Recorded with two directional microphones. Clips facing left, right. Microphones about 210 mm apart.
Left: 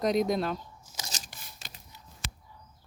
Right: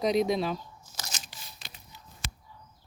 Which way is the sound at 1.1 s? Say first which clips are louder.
Even; 45° left (ahead or behind).